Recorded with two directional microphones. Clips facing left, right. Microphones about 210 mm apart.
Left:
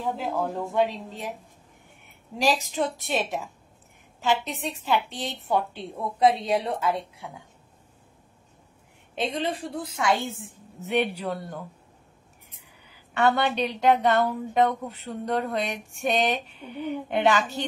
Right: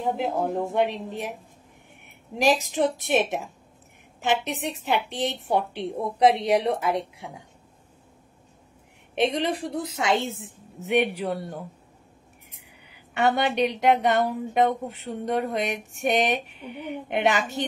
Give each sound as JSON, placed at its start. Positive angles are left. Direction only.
{"t": 0.2, "sound": "a woman's voice", "side_deg": -20}
{"t": 2.3, "sound": "a woman's voice", "side_deg": -15}
{"t": 9.3, "sound": "a woman's voice", "side_deg": -80}
{"t": 10.9, "sound": "a woman's voice", "side_deg": -15}
{"t": 13.1, "sound": "a woman's voice", "side_deg": -15}